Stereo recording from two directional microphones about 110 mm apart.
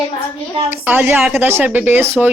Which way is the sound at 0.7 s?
15° right (ahead or behind).